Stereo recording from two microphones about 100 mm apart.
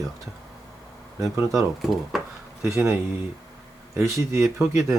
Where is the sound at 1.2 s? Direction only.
30° right (ahead or behind).